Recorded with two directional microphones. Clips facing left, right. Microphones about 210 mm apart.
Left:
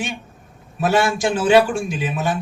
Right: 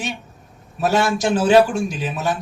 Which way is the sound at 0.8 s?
40° right (ahead or behind).